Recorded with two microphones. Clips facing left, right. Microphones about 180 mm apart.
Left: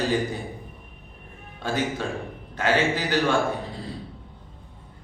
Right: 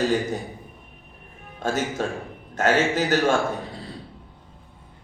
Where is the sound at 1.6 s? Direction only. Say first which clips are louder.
Right 2 dB; 45° right (ahead or behind).